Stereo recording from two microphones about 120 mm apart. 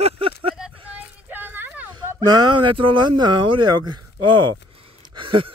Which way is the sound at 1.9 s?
35° right (ahead or behind).